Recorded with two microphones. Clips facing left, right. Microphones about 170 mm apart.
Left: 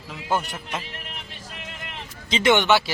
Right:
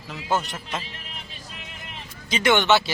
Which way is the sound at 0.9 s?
65° left (ahead or behind).